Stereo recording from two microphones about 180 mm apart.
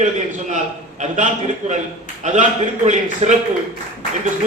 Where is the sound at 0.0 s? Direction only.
40° right (ahead or behind).